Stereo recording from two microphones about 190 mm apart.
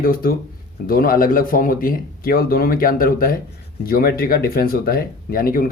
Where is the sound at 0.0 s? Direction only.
50° left (ahead or behind).